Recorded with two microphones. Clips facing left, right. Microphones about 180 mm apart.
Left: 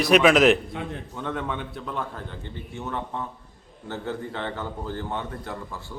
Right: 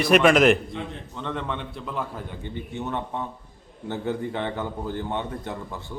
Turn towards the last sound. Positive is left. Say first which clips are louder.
# right 2 dB
turn(degrees=-20)  # may be behind; listen again after turning